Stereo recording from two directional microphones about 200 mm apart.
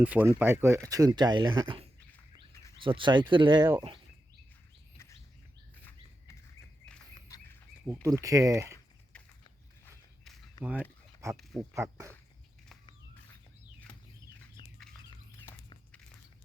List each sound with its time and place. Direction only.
0.0 s speech: 10° right (ahead or behind); by 3.7 s 25° right (ahead or behind)
6.8 s a sound: 5° left (ahead or behind)
7.3 s bird: 20° left (ahead or behind)
8.0 s speech: 15° right (ahead or behind)
9.1 s a sound: 5° left (ahead or behind)
10.6 s speech: 5° right (ahead or behind)
14.6 s bird: 20° left (ahead or behind)